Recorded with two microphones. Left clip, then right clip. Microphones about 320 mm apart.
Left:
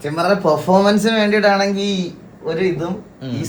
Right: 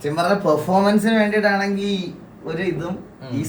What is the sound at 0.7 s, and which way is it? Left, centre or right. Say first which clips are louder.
Speech: left 3 dB; left.